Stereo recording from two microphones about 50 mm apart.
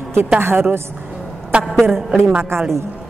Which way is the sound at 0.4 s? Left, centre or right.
Right.